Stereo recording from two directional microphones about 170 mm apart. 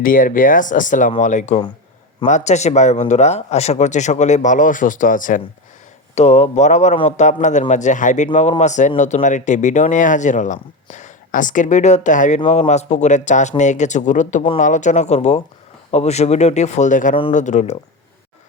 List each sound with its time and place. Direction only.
0.0 s speech: 55° left (ahead or behind)
6.1 s speech: 40° left (ahead or behind)